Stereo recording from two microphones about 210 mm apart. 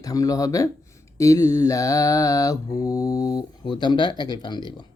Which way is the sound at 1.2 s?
15° left (ahead or behind).